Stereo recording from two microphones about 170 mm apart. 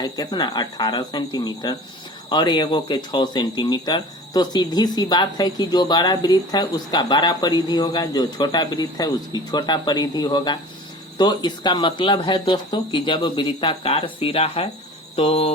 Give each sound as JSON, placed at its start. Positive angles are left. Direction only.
{"t": 0.0, "sound": "speech", "side_deg": 25}
{"t": 15.1, "sound": "hum", "side_deg": 35}